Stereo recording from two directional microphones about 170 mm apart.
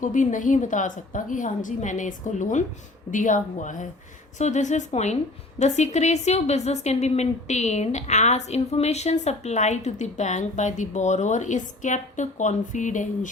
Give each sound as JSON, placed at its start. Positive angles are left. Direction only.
{"t": 0.0, "sound": "a woman's voice", "side_deg": 50}